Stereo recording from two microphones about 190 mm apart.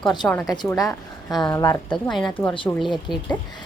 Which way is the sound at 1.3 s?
5° left (ahead or behind).